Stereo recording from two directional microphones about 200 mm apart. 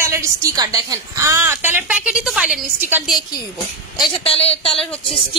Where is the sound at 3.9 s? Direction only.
25° left (ahead or behind).